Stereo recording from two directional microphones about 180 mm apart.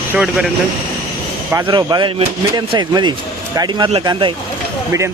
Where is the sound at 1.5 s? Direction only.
20° right (ahead or behind).